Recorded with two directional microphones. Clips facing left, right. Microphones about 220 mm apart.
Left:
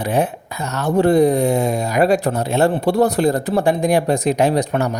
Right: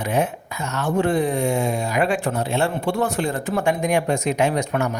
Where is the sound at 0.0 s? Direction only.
35° left (ahead or behind).